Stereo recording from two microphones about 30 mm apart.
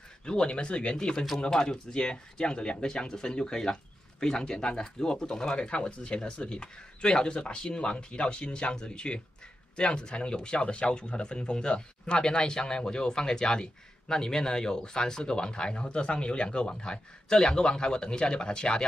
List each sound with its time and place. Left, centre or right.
0.2 s speech: left
1.4 s speech: left